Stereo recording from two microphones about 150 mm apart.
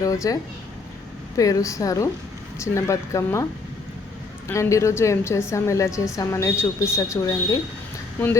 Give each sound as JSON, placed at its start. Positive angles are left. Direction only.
{"t": 0.0, "sound": "a woman's voice", "side_deg": 25}
{"t": 1.4, "sound": "a woman's voice", "side_deg": 25}
{"t": 4.4, "sound": "a woman's voice", "side_deg": 20}